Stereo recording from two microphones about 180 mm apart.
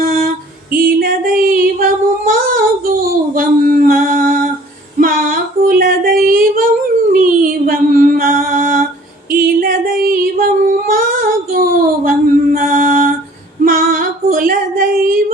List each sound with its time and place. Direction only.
0.0 s music: 55° right (ahead or behind)
0.7 s a sound: 55° right (ahead or behind)
7.1 s music: 50° right (ahead or behind)
9.6 s female singing: 55° right (ahead or behind)